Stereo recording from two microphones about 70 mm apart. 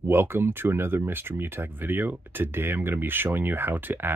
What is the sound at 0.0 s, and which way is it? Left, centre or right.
Speech, right.